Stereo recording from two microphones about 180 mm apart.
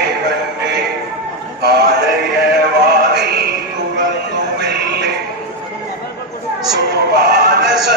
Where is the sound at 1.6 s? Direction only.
65° right (ahead or behind).